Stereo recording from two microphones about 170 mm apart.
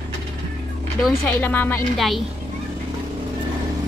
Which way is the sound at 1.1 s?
10° left (ahead or behind).